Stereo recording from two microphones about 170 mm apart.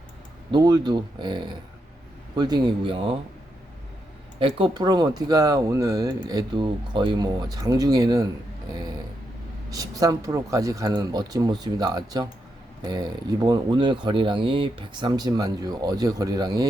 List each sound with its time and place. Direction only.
0.5 s speech: 25° right (ahead or behind)
4.4 s speech: 30° right (ahead or behind)
9.6 s speech: 20° right (ahead or behind)